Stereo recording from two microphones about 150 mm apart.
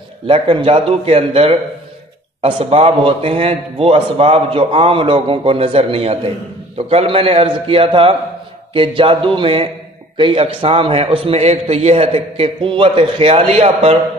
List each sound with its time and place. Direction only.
0.3 s a man's voice: 35° right (ahead or behind)